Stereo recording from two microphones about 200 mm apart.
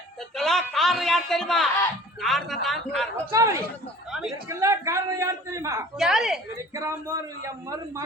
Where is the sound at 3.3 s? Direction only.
15° right (ahead or behind).